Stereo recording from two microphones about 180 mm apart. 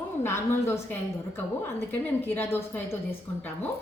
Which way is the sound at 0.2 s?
15° left (ahead or behind).